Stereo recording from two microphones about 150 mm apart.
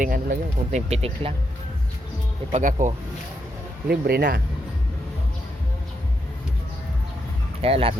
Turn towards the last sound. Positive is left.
turn(degrees=-40)  # may be behind; listen again after turning